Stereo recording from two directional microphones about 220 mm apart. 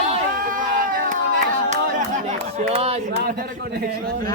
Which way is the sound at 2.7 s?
25° right (ahead or behind).